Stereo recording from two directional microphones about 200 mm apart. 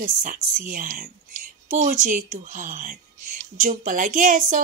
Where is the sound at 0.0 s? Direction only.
45° right (ahead or behind).